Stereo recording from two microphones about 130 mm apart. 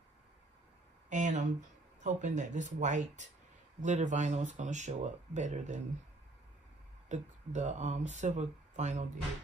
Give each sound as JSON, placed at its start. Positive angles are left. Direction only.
{"t": 1.1, "sound": "speech", "side_deg": -70}
{"t": 7.1, "sound": "speech", "side_deg": -65}